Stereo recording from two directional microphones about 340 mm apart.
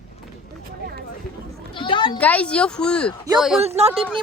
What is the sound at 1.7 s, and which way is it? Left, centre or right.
Speech, centre.